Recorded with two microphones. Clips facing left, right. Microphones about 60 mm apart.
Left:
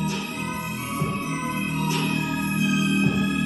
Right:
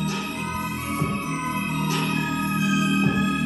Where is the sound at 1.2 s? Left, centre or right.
Right.